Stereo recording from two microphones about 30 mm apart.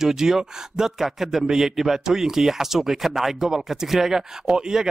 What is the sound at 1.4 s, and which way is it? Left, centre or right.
Speech, centre.